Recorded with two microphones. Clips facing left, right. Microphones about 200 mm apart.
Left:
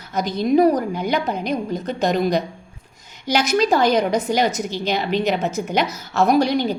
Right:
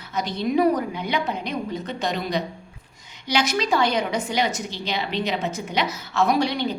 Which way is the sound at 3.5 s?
45° left (ahead or behind).